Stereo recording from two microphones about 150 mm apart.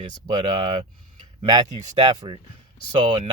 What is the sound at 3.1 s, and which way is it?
Speech, 50° right (ahead or behind).